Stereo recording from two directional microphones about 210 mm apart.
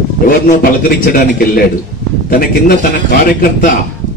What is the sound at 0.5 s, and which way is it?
A man's voice, 40° left (ahead or behind).